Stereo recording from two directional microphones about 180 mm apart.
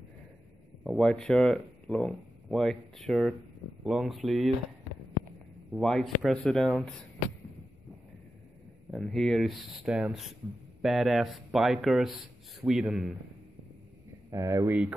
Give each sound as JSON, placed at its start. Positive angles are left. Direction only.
{"t": 0.8, "sound": "speech", "side_deg": 5}
{"t": 5.7, "sound": "speech", "side_deg": 0}
{"t": 8.9, "sound": "speech", "side_deg": 0}
{"t": 14.3, "sound": "speech", "side_deg": -20}